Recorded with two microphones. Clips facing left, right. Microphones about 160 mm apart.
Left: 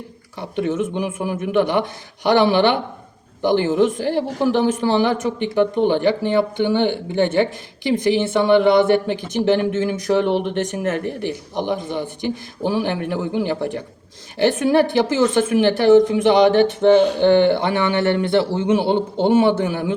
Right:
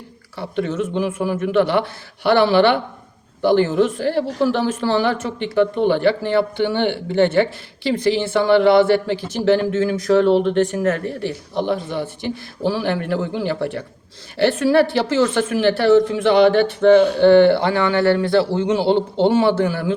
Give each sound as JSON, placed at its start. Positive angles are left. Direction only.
{"t": 0.3, "sound": "speech", "side_deg": 15}